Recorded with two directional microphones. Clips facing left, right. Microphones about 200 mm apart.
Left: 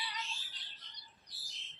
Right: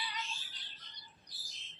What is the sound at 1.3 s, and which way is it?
Bird, centre (ahead or behind).